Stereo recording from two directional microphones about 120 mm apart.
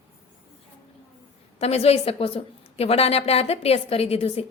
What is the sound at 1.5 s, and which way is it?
A woman's voice, 60° left (ahead or behind).